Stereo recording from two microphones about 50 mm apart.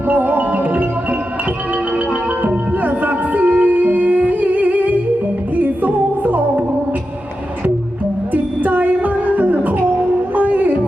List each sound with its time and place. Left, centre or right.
0.1 s music: right
2.8 s music: right
8.3 s music: right